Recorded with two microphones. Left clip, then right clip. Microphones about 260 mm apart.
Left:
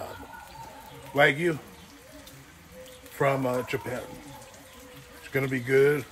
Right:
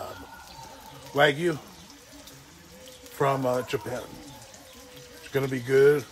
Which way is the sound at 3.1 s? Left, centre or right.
Centre.